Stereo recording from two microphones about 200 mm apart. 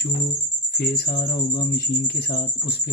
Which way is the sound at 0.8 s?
55° left (ahead or behind).